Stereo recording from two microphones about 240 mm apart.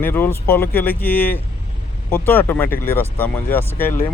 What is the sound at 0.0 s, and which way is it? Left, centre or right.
Speech, centre.